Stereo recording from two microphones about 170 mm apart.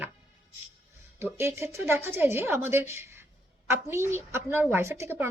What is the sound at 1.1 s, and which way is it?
A woman's voice, 15° right (ahead or behind).